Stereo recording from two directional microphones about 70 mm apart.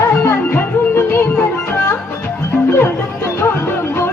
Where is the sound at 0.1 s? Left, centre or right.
Left.